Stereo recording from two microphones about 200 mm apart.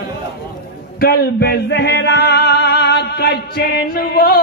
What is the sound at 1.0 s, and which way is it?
Music, 50° left (ahead or behind).